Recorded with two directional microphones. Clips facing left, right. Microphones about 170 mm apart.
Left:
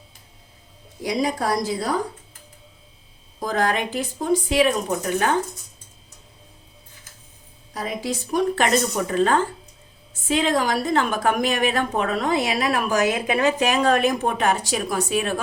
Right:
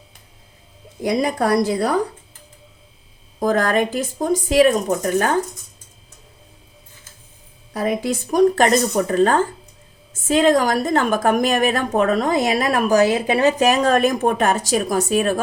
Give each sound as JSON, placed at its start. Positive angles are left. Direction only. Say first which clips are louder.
{"t": 1.0, "sound": "a woman's voice", "louder": "right 4 dB", "side_deg": -55}
{"t": 3.4, "sound": "a woman's voice", "louder": "right 5 dB", "side_deg": -50}
{"t": 7.7, "sound": "a woman's voice", "louder": "right 6 dB", "side_deg": -55}
{"t": 13.0, "sound": "a woman's voice", "louder": "right 4 dB", "side_deg": -35}